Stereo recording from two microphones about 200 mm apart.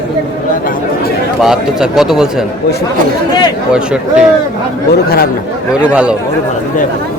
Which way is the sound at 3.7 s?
5° right (ahead or behind).